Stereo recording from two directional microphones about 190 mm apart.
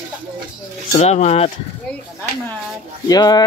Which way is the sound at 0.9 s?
35° left (ahead or behind).